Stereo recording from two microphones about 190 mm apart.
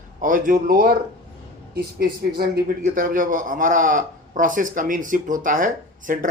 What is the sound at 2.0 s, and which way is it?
A man's voice, 55° right (ahead or behind).